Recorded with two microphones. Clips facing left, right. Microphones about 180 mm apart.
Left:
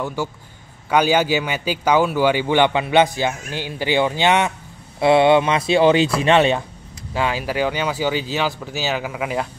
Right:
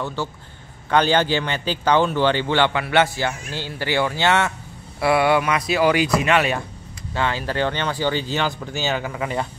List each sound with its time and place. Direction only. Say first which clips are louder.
0.0 s a man's voice: left 2 dB; 10° left (ahead or behind); by 6.6 s 25° left (ahead or behind)
7.2 s a man's voice: left 2 dB; 10° left (ahead or behind)